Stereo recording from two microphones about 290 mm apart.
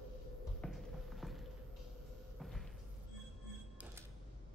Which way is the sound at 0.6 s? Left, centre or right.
Centre.